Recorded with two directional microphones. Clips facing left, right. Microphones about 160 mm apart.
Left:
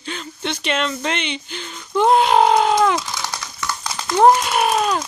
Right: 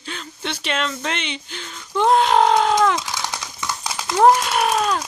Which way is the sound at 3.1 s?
20° right (ahead or behind).